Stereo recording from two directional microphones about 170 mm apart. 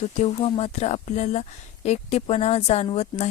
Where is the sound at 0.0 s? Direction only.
40° left (ahead or behind).